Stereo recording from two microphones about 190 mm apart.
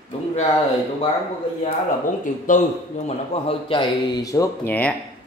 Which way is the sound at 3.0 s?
30° left (ahead or behind).